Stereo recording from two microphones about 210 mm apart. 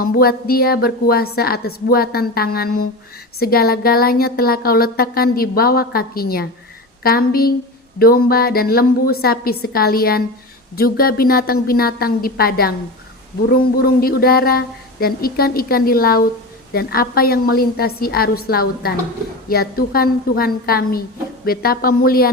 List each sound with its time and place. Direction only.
0.0 s a woman's voice: 45° left (ahead or behind)